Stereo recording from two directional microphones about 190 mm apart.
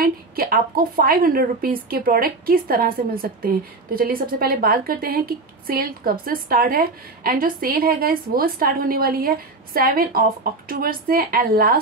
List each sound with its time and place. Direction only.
0.0 s a woman's voice: 50° right (ahead or behind)